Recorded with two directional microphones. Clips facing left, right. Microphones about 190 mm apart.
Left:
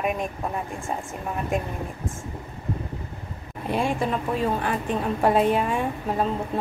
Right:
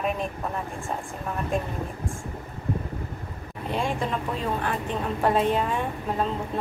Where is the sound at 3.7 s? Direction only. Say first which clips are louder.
Left 3 dB; 10° left (ahead or behind).